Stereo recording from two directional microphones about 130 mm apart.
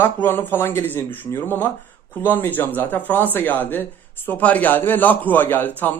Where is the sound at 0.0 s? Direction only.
15° left (ahead or behind).